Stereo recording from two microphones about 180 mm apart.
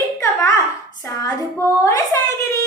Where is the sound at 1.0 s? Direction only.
15° left (ahead or behind).